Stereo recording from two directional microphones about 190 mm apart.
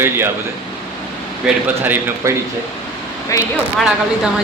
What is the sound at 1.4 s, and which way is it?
Speech, 10° right (ahead or behind).